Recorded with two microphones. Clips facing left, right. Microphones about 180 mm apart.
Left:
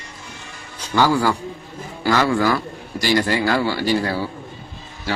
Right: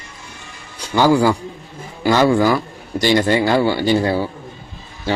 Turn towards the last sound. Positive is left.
turn(degrees=-25)  # may be behind; listen again after turning